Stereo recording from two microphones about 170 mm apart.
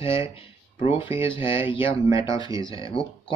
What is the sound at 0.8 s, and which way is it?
Speech, 30° left (ahead or behind).